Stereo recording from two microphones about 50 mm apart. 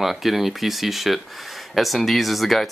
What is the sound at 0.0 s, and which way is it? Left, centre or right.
Speech, centre.